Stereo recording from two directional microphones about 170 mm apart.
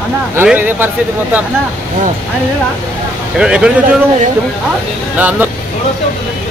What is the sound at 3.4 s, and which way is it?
Speech, 5° right (ahead or behind).